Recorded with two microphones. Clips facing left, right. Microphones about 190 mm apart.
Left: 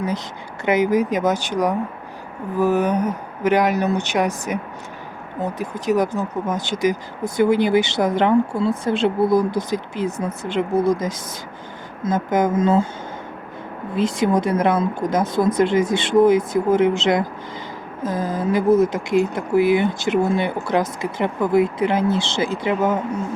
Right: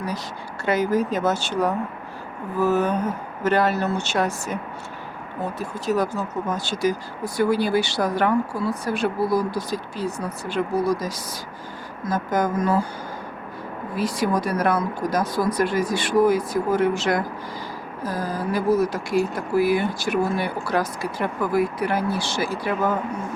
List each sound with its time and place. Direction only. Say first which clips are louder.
0.6 s speech: left 4 dB; 20° left (ahead or behind)
13.9 s speech: left 4 dB; 20° left (ahead or behind)